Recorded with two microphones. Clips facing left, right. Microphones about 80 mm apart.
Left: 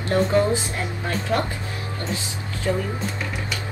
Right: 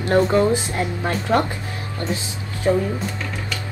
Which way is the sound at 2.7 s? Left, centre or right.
Right.